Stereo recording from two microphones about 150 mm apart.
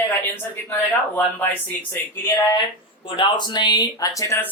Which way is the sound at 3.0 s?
30° left (ahead or behind).